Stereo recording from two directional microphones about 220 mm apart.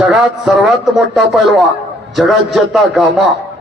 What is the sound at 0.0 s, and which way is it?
Speech, 5° right (ahead or behind).